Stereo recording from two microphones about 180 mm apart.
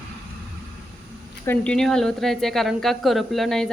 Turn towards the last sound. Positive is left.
turn(degrees=0)  # may be behind; listen again after turning